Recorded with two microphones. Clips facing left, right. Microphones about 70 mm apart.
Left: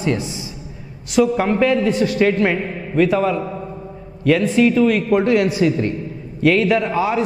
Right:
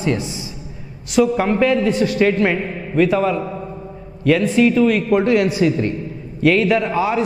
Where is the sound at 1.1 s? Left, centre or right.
Centre.